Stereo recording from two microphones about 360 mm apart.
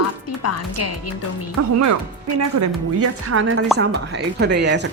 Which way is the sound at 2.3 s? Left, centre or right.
Right.